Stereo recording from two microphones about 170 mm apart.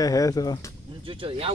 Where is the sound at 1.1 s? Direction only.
30° right (ahead or behind).